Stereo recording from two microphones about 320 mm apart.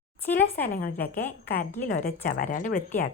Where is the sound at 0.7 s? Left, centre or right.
Left.